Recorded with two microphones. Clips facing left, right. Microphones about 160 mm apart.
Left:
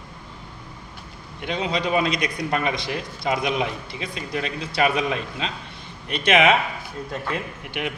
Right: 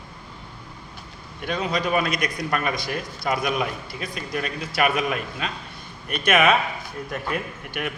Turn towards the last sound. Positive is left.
turn(degrees=20)  # may be behind; listen again after turning